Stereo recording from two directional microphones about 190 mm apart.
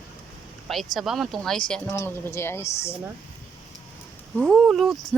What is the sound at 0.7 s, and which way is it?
Speech, centre (ahead or behind).